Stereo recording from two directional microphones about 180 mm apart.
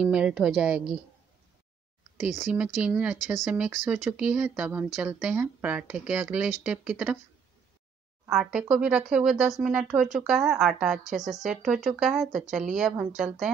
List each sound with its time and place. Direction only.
0.0 s speech: 5° right (ahead or behind)
2.1 s speech: centre (ahead or behind)
8.3 s speech: 5° right (ahead or behind)